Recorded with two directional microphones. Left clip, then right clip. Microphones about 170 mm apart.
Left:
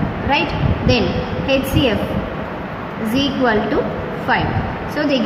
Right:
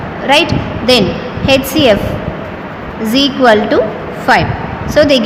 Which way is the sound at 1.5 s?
55° right (ahead or behind).